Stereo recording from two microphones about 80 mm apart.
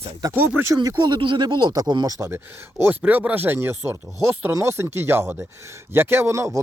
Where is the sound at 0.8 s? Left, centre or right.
Right.